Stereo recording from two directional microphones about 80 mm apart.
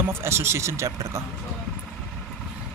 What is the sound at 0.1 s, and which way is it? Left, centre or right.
Speech, right.